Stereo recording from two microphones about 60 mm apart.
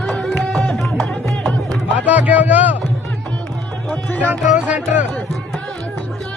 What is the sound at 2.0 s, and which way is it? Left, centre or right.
Music, right.